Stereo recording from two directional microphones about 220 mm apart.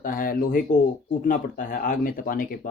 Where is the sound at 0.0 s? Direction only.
40° left (ahead or behind).